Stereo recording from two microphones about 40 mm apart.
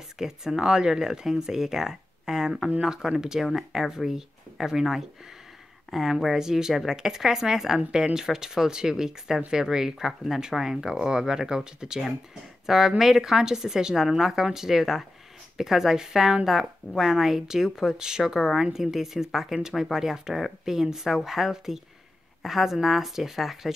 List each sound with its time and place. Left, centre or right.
0.2 s speech: centre